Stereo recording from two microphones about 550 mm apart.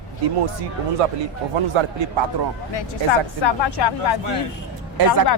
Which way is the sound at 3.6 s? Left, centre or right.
Left.